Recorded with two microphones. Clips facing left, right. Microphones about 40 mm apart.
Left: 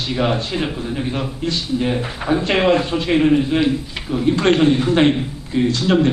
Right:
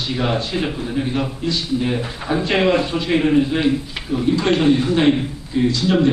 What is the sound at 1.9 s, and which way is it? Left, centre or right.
Speech, centre.